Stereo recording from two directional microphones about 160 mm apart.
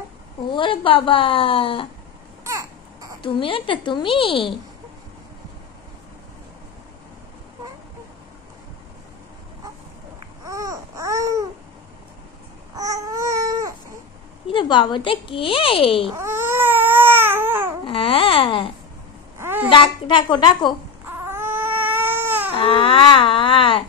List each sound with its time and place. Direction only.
0.5 s speech: 30° left (ahead or behind)
2.4 s baby cry: 20° right (ahead or behind)
3.2 s speech: 30° left (ahead or behind)
10.4 s babbling: 20° right (ahead or behind)
12.7 s a sound: 20° right (ahead or behind)
14.5 s speech: 30° left (ahead or behind)
16.1 s baby cry: 15° right (ahead or behind)
17.8 s a sound: 35° left (ahead or behind)
19.3 s babbling: 15° right (ahead or behind)
19.7 s speech: 30° left (ahead or behind)
21.0 s baby cry: 15° right (ahead or behind)
22.6 s speech: 35° left (ahead or behind)